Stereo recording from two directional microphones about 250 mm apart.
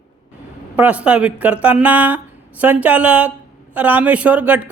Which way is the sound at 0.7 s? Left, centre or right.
Centre.